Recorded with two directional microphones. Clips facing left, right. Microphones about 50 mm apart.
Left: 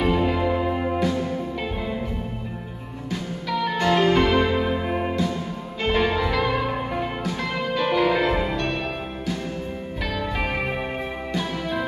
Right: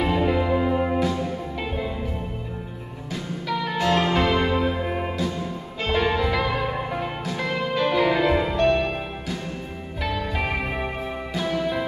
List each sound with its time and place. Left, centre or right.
0.0 s music: centre
3.4 s music: centre
10.0 s music: centre